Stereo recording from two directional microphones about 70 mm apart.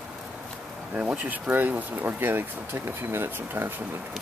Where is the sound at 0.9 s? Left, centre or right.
Centre.